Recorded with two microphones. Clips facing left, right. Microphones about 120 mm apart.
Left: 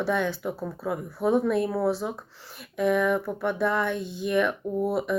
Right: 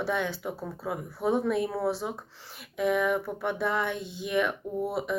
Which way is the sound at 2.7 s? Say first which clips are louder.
Left 3 dB; 15° right (ahead or behind).